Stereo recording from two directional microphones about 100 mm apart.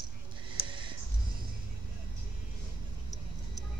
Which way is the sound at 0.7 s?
55° right (ahead or behind).